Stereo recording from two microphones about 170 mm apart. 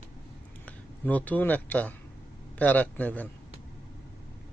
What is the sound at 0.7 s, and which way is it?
Speech, 10° left (ahead or behind).